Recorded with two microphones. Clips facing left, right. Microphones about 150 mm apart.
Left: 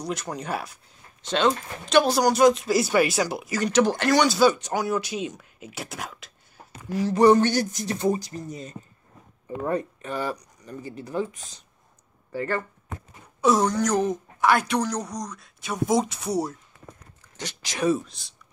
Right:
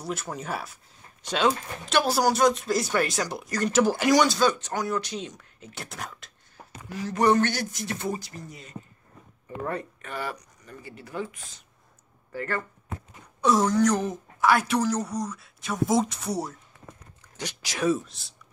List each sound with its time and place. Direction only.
0.0 s speech: 5° right (ahead or behind)
7.1 s speech: 30° left (ahead or behind)
9.7 s speech: 20° left (ahead or behind)
13.4 s speech: centre (ahead or behind)
17.4 s speech: 10° right (ahead or behind)